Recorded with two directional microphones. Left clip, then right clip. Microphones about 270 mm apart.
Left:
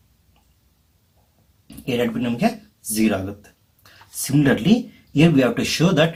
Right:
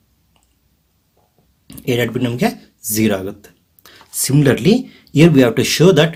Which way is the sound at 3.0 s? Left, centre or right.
Right.